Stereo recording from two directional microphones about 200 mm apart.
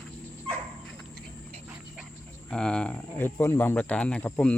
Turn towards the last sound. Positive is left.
turn(degrees=5)  # may be behind; listen again after turning